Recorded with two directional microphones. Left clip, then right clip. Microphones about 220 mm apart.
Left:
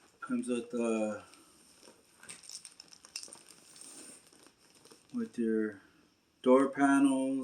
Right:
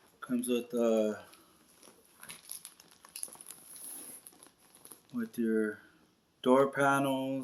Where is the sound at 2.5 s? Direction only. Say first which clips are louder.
Left 3 dB; 5° right (ahead or behind).